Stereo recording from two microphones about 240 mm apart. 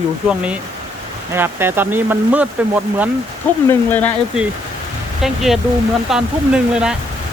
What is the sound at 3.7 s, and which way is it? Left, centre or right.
Speech, centre.